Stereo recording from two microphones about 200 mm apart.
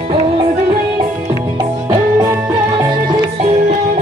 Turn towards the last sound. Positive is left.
turn(degrees=-15)  # may be behind; listen again after turning